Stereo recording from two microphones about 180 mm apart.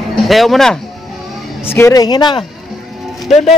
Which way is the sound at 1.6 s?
15° left (ahead or behind).